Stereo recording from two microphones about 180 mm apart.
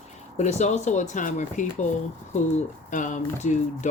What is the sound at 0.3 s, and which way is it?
Speech, 40° left (ahead or behind).